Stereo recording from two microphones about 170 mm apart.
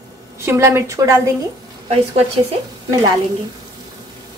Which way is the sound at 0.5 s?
15° right (ahead or behind).